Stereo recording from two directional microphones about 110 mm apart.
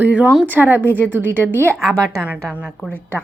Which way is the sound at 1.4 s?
15° left (ahead or behind).